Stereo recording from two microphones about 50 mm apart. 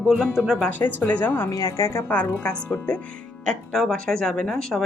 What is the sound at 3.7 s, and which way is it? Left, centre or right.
Speech, centre.